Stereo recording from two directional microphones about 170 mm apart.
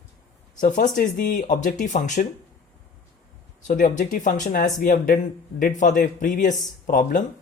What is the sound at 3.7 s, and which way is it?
Speech, 50° left (ahead or behind).